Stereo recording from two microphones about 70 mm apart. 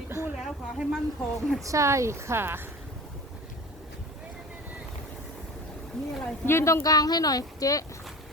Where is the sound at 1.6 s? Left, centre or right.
Right.